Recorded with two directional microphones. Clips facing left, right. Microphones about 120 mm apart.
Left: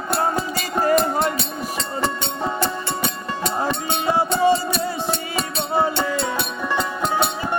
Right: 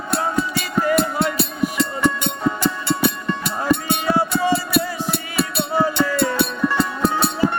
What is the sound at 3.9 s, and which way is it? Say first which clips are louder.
Music: right 1 dB; 25° left (ahead or behind).